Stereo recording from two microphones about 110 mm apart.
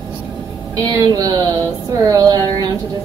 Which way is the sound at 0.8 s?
35° right (ahead or behind).